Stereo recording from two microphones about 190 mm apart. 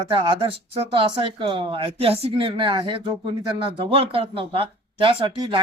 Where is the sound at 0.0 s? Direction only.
30° right (ahead or behind).